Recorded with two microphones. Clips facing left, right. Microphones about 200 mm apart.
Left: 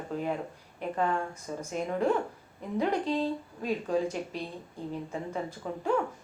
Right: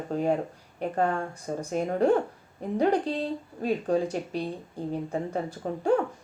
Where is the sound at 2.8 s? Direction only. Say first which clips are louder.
Right 3 dB; 35° right (ahead or behind).